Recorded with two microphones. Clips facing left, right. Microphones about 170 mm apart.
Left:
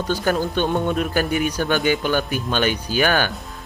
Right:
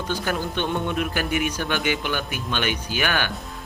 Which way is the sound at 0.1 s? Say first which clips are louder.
Left 6 dB; 40° left (ahead or behind).